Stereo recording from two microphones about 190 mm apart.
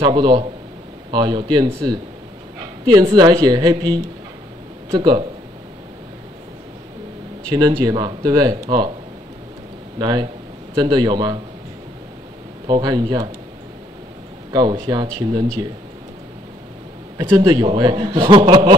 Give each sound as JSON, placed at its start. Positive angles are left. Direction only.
{"t": 0.0, "sound": "a man's voice", "side_deg": -25}
{"t": 2.9, "sound": "a man's voice", "side_deg": -20}
{"t": 7.4, "sound": "a man's voice", "side_deg": -20}
{"t": 9.9, "sound": "a man's voice", "side_deg": -20}
{"t": 12.6, "sound": "a man's voice", "side_deg": -20}
{"t": 14.5, "sound": "a man's voice", "side_deg": -20}
{"t": 17.2, "sound": "a man's voice", "side_deg": -20}